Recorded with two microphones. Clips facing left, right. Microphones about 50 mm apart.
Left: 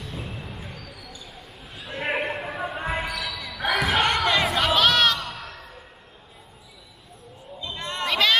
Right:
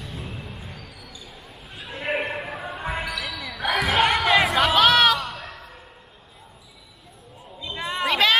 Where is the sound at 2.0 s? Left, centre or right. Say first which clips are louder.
Even; centre.